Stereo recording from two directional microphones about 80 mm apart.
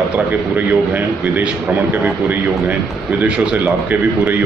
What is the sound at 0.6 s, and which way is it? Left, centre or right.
A man's voice, right.